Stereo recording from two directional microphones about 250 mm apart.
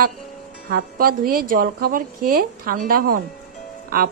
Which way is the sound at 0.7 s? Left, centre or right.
Right.